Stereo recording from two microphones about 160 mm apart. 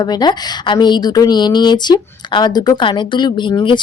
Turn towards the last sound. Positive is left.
turn(degrees=30)  # may be behind; listen again after turning